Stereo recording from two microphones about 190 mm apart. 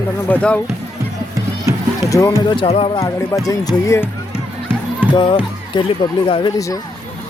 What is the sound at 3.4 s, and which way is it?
Speech, 20° left (ahead or behind).